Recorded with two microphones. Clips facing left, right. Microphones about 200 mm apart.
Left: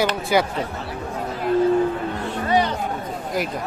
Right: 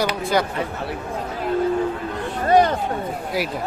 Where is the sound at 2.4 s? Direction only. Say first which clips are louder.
Right 5 dB; 45° right (ahead or behind).